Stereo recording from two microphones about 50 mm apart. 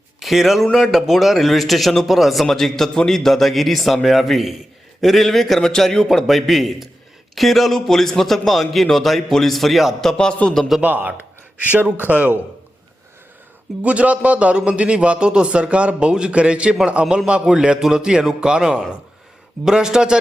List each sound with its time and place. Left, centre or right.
0.2 s a man's voice: centre
2.5 s a man's voice: centre
10.0 s a man's voice: centre
10.8 s a man's voice: right
13.8 s a man's voice: right